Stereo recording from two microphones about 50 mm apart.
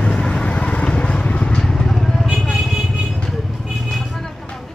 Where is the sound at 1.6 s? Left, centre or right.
Centre.